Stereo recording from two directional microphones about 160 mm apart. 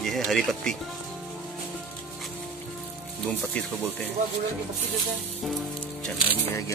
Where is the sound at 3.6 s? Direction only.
5° left (ahead or behind).